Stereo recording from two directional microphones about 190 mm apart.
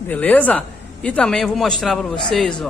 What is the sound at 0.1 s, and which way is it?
A man's voice, 10° left (ahead or behind).